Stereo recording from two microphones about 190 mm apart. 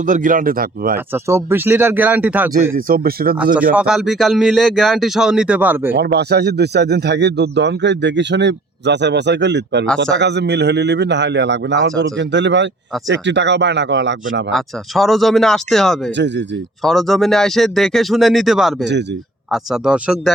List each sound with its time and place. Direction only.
0.0 s speech: 45° right (ahead or behind)
0.9 s speech: 10° right (ahead or behind)
2.7 s speech: 50° right (ahead or behind)
3.5 s speech: 5° right (ahead or behind)
5.9 s speech: 60° right (ahead or behind)
14.5 s speech: centre (ahead or behind)
16.1 s speech: 70° right (ahead or behind)
16.8 s speech: centre (ahead or behind)